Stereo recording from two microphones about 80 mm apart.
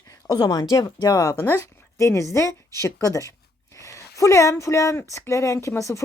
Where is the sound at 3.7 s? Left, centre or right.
Left.